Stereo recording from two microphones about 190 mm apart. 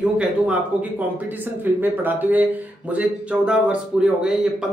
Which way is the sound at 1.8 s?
10° right (ahead or behind).